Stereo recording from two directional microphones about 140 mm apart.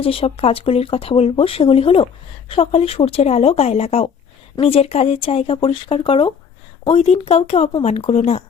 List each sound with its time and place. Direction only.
0.0 s speech: 40° left (ahead or behind)